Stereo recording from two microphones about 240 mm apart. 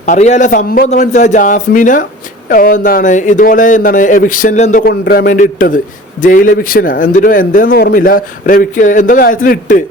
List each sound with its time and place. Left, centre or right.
0.0 s a man's voice: left